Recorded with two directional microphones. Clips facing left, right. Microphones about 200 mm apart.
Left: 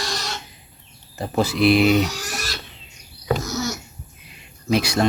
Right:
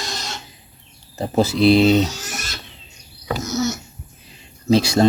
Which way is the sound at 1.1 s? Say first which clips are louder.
Right 3 dB; 20° right (ahead or behind).